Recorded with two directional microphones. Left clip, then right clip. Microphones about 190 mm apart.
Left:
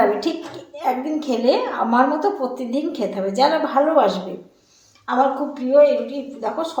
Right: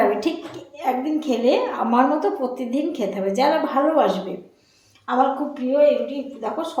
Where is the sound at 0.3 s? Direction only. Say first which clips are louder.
Left 1 dB; 15° right (ahead or behind).